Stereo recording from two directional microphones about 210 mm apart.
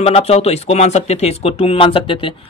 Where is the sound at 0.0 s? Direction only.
30° left (ahead or behind).